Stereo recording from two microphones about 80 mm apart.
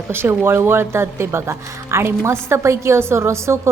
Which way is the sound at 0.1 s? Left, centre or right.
Right.